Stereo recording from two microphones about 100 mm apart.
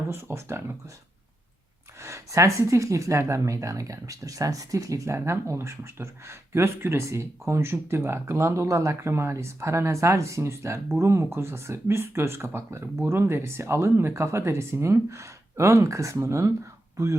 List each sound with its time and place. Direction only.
0.1 s speech: 25° right (ahead or behind)
2.0 s speech: 30° right (ahead or behind)